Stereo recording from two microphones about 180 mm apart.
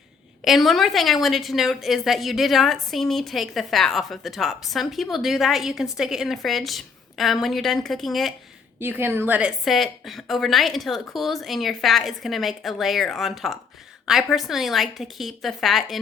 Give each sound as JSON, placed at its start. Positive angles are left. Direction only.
{"t": 0.4, "sound": "a woman's voice", "side_deg": 0}
{"t": 8.8, "sound": "a woman's voice", "side_deg": -10}